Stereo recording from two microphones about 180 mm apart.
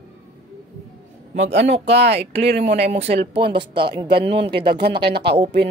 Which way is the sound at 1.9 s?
70° right (ahead or behind).